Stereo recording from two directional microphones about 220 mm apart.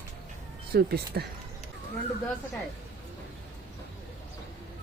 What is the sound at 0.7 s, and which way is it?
Speech, 45° right (ahead or behind).